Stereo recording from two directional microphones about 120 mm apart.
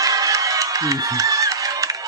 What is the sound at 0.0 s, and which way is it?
Music, 30° right (ahead or behind).